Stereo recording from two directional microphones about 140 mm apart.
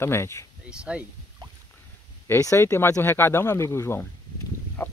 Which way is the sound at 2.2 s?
20° left (ahead or behind).